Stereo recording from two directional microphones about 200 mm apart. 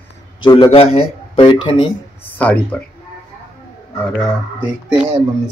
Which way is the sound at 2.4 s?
5° left (ahead or behind).